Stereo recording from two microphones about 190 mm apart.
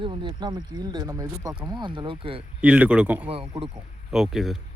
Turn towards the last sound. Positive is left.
turn(degrees=0)  # may be behind; listen again after turning